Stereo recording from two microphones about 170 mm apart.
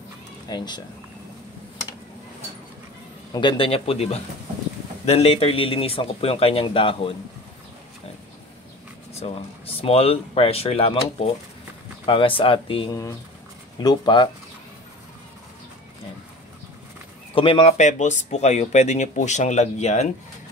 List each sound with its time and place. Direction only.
0.5 s speech: 25° left (ahead or behind)
3.3 s a man's voice: 30° left (ahead or behind)
9.2 s a man's voice: 35° left (ahead or behind)
17.3 s speech: 30° left (ahead or behind)